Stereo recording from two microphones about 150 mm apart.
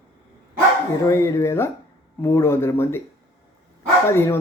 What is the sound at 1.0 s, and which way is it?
Speech, 20° left (ahead or behind).